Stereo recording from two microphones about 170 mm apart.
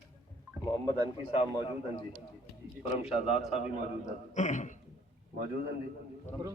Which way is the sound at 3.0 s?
35° left (ahead or behind).